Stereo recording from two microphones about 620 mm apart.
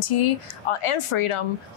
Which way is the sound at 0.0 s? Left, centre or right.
Left.